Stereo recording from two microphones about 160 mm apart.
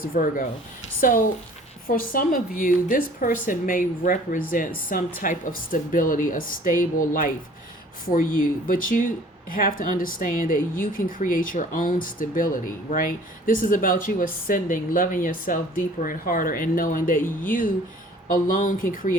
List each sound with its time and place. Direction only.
0.0 s speech: 60° left (ahead or behind)
1.9 s speech: 60° left (ahead or behind)